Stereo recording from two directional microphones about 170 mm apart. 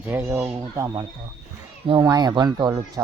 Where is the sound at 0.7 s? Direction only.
20° right (ahead or behind).